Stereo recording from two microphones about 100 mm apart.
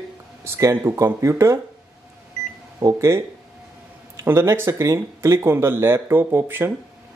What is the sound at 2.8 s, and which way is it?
Speech, 35° right (ahead or behind).